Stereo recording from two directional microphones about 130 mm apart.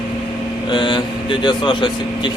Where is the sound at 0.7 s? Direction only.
35° left (ahead or behind).